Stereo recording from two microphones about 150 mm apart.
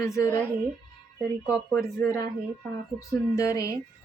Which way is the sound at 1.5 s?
Centre (ahead or behind).